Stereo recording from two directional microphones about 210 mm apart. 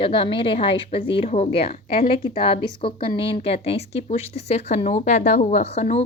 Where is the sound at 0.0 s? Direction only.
25° left (ahead or behind).